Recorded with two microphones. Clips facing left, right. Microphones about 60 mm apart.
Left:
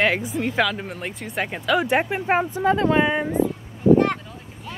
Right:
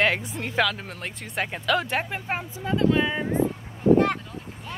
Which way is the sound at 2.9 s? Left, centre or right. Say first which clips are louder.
Left 5 dB; left.